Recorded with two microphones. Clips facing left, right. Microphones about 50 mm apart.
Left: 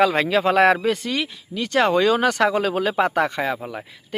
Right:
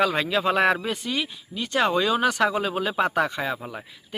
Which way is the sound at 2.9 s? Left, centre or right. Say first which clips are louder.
Left 3 dB; left.